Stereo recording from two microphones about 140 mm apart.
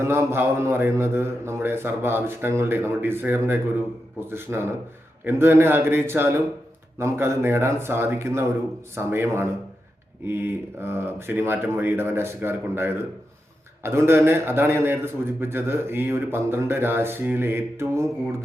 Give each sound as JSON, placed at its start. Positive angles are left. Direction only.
{"t": 0.0, "sound": "a man's voice", "side_deg": -20}